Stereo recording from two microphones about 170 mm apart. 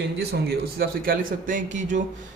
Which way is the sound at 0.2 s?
70° right (ahead or behind).